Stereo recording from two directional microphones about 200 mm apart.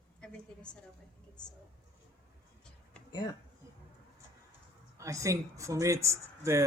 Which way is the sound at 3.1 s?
20° left (ahead or behind).